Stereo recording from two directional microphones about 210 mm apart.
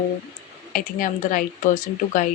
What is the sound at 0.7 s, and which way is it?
Speech, 40° left (ahead or behind).